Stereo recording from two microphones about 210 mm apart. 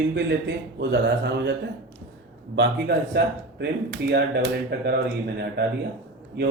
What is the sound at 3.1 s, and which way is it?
Speech, 50° right (ahead or behind).